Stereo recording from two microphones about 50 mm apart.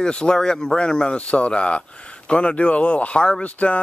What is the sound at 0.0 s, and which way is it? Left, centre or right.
Speech, centre.